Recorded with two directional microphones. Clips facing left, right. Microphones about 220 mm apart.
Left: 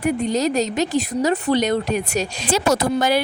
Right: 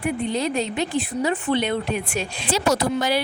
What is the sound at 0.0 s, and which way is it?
Speech, 40° left (ahead or behind).